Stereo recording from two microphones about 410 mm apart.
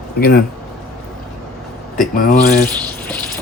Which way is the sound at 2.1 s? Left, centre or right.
Centre.